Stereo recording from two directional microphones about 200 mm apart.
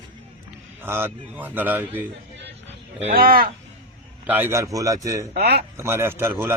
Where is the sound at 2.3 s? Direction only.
60° right (ahead or behind).